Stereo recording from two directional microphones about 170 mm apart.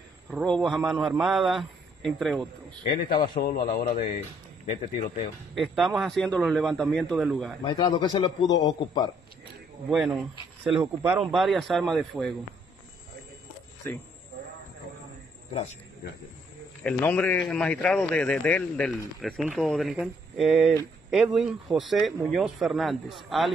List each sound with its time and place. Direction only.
0.3 s speech: centre (ahead or behind)
2.8 s a man's voice: 30° left (ahead or behind)
3.2 s a man's voice: 65° left (ahead or behind)
5.5 s speech: centre (ahead or behind)
7.6 s a man's voice: 25° left (ahead or behind)
9.8 s speech: centre (ahead or behind)
13.9 s speech: 10° left (ahead or behind)
16.8 s speech: 10° left (ahead or behind)